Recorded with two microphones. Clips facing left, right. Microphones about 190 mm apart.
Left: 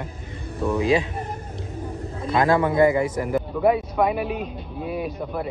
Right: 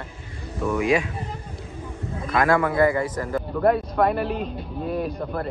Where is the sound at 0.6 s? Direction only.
30° left (ahead or behind).